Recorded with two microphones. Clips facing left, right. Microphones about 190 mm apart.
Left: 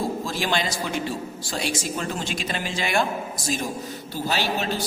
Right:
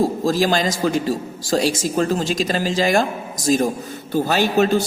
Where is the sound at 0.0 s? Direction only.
40° right (ahead or behind).